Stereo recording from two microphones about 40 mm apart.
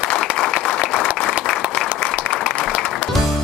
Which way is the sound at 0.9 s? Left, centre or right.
Centre.